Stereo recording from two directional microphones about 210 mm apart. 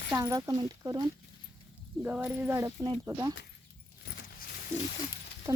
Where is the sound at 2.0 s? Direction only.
5° right (ahead or behind).